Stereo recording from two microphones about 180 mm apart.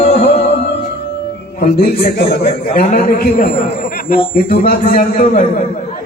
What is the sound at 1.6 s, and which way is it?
A man's voice, 55° left (ahead or behind).